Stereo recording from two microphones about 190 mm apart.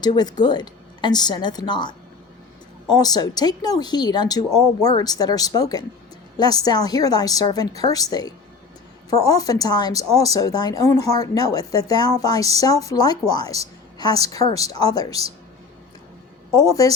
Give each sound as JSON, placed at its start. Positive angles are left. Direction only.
{"t": 0.0, "sound": "a woman's voice", "side_deg": 20}